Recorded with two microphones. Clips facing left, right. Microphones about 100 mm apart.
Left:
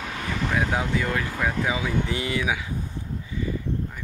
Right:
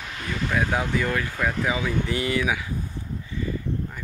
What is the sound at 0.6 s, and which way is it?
Speech, 20° left (ahead or behind).